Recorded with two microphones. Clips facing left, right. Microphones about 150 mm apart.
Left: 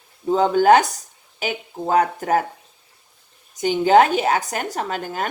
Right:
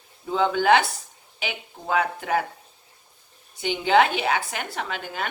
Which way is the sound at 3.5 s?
40° left (ahead or behind).